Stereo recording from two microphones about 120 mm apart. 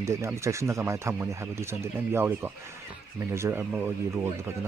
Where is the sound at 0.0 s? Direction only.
25° right (ahead or behind).